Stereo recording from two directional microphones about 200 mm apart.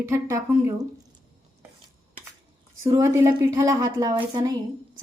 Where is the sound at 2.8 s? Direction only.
15° right (ahead or behind).